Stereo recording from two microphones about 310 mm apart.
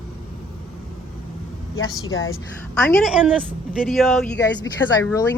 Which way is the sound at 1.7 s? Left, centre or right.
Left.